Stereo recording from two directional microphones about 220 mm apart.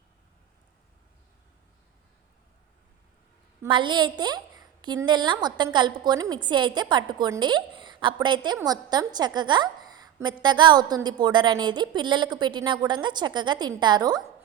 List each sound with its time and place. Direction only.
3.6 s a woman's voice: 20° right (ahead or behind)